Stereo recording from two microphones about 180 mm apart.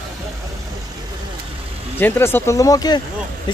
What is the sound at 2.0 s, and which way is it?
Speech, 10° left (ahead or behind).